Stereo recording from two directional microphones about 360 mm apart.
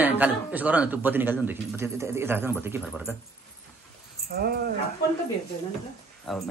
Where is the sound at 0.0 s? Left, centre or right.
Centre.